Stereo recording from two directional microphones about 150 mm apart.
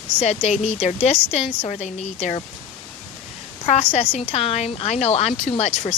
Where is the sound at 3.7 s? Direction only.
50° left (ahead or behind).